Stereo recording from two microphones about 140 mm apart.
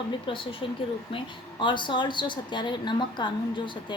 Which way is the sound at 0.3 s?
35° left (ahead or behind).